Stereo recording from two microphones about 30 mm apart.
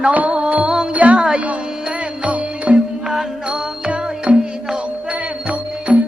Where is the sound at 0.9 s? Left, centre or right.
Right.